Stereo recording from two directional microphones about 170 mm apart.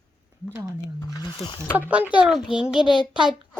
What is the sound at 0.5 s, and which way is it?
Speech, 15° right (ahead or behind).